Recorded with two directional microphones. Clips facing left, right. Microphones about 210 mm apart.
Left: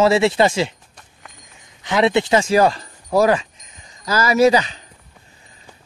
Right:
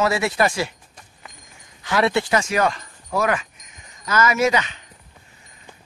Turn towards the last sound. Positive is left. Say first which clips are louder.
# left 6 dB
turn(degrees=35)  # may be behind; listen again after turning